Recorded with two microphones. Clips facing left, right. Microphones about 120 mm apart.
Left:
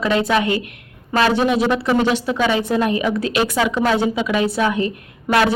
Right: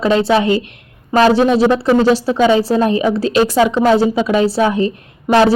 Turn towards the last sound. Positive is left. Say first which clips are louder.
# right 5 dB
turn(degrees=-30)  # may be behind; listen again after turning